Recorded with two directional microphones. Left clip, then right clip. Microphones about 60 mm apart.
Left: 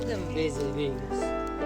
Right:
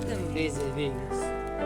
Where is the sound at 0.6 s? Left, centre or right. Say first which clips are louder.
Left 1 dB; right.